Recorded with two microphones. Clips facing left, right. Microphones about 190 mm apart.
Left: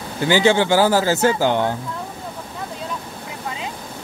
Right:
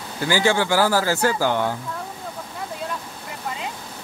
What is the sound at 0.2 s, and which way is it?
Speech, 20° left (ahead or behind).